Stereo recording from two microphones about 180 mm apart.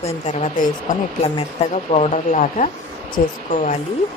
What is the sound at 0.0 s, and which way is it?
Speech, 35° left (ahead or behind).